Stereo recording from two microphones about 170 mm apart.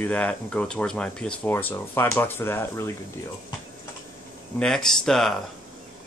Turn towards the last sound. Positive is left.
turn(degrees=0)  # may be behind; listen again after turning